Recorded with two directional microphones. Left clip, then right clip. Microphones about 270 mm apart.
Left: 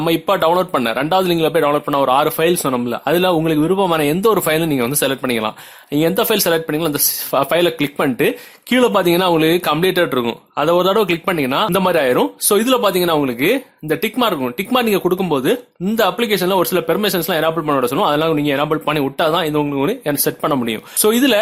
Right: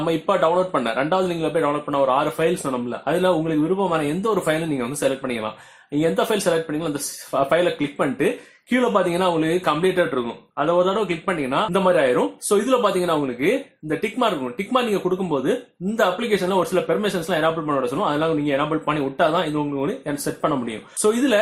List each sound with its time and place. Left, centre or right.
0.0 s speech: left